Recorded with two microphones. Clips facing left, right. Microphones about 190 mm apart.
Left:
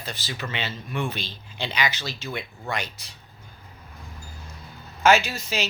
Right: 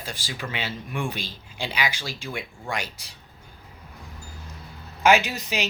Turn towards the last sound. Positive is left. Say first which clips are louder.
# right 1 dB
turn(degrees=-15)  # may be behind; listen again after turning